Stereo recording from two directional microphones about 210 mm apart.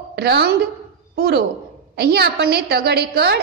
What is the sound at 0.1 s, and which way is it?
A woman's voice, 50° right (ahead or behind).